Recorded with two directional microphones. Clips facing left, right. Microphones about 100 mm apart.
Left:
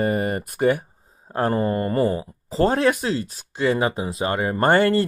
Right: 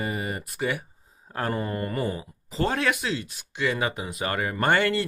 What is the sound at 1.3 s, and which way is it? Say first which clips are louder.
Speech: left 7 dB; 35° left (ahead or behind).